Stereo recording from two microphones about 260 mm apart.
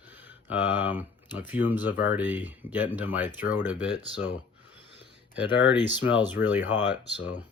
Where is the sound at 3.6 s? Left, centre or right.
Centre.